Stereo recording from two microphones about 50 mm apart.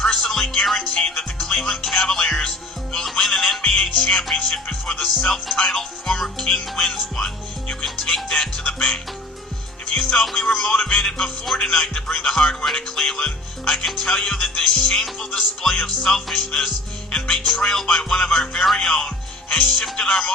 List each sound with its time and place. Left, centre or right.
0.0 s music: centre
10.0 s music: centre
10.8 s music: left; by 16.4 s centre
16.5 s music: centre